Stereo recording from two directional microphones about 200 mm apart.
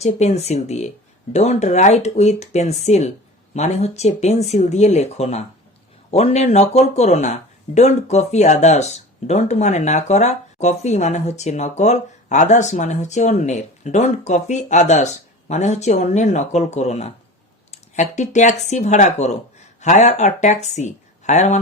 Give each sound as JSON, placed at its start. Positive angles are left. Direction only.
{"t": 0.0, "sound": "speech", "side_deg": 35}